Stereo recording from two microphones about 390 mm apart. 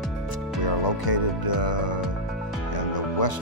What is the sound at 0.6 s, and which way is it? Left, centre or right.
Speech, left.